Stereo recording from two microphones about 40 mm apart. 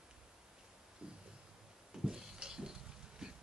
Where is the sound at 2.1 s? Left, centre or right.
Centre.